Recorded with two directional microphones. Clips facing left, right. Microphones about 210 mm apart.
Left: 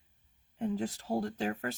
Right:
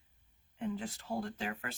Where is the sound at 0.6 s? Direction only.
40° left (ahead or behind).